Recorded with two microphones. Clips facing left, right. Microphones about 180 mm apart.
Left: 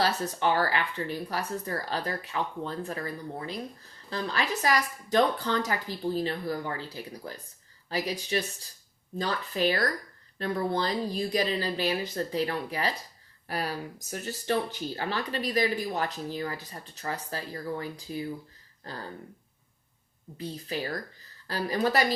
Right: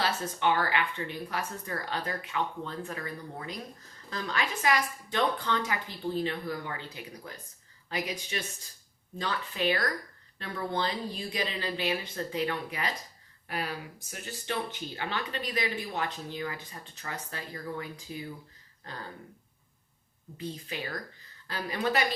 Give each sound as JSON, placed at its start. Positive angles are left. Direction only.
{"t": 0.0, "sound": "speech", "side_deg": 35}
{"t": 20.4, "sound": "speech", "side_deg": 35}